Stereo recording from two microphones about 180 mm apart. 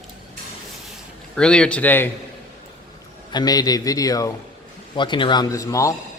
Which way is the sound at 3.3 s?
20° left (ahead or behind).